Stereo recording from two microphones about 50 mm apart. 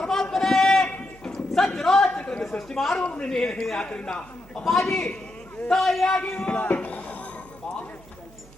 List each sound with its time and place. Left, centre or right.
0.0 s a sound: centre
1.2 s clip-clop: centre
2.4 s a woman's voice: centre
3.0 s a man's voice: left
3.2 s a man's voice: centre
4.6 s a man's voice: centre
6.1 s a man's voice: centre
6.7 s a sound: left